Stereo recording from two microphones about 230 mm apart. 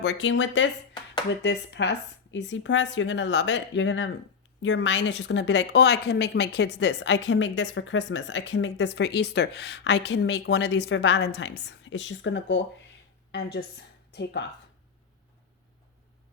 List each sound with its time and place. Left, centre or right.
0.0 s a woman's voice: left